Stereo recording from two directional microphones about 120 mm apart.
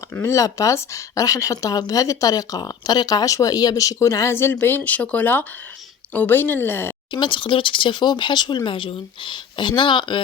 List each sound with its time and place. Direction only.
0.1 s speech: 25° left (ahead or behind)
7.1 s speech: 40° left (ahead or behind)